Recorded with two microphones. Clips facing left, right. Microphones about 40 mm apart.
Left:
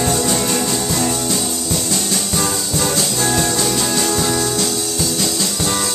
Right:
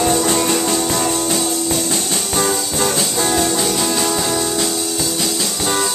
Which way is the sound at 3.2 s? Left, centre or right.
Centre.